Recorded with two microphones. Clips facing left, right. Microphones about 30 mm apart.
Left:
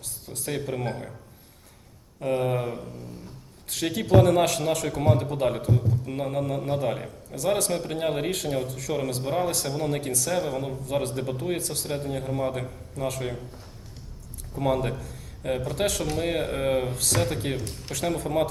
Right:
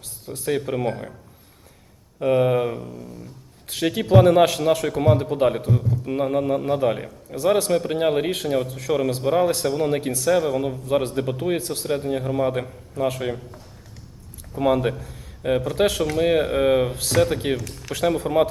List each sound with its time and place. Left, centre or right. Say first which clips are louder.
0.5 s a man's voice: right 6 dB; centre
2.1 s a man's voice: right 7 dB; right
14.5 s a man's voice: right 5 dB; right
15.0 s a sound: right 5 dB; centre
15.8 s a man's voice: right 7 dB; centre